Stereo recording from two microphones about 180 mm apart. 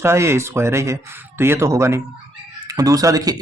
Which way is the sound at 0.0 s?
15° right (ahead or behind).